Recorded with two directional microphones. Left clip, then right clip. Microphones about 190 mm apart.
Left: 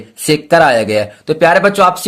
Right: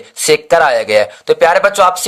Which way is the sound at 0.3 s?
20° right (ahead or behind).